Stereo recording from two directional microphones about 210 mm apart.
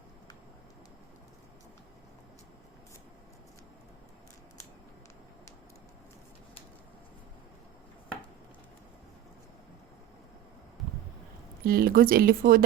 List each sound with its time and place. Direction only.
11.6 s speech: 45° right (ahead or behind)